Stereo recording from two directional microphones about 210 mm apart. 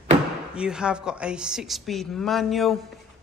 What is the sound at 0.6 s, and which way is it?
Speech, 5° right (ahead or behind).